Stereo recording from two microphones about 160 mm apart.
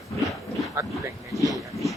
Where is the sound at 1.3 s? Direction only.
20° left (ahead or behind).